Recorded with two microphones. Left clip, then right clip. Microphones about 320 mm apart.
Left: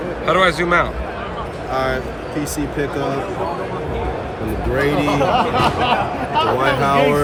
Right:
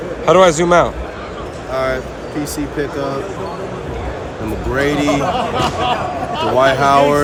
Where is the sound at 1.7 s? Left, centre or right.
Centre.